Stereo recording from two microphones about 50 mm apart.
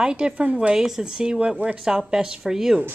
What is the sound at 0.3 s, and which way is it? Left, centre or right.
Speech, right.